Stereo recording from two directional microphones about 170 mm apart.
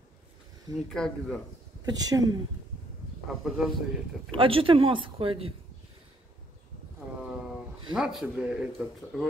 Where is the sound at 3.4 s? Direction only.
Centre (ahead or behind).